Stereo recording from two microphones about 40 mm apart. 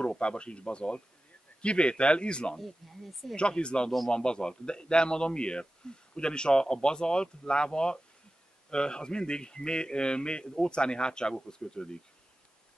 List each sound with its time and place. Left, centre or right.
0.2 s a man's voice: left
2.5 s speech: centre
3.3 s a man's voice: left